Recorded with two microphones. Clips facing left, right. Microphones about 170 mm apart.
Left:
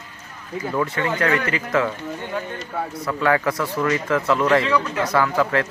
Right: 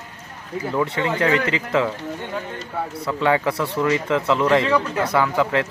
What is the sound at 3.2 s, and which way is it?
Speech, 25° right (ahead or behind).